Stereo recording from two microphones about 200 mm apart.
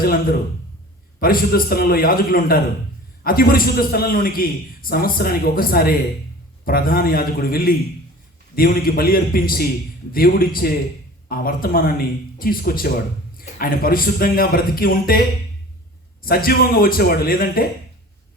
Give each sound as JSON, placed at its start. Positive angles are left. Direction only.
{"t": 1.2, "sound": "a man's voice", "side_deg": 45}
{"t": 16.2, "sound": "a man's voice", "side_deg": 50}